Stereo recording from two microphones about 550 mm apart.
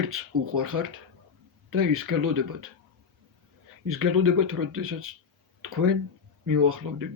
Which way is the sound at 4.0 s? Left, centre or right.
Right.